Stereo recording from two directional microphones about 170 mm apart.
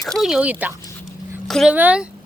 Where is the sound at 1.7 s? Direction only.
10° right (ahead or behind).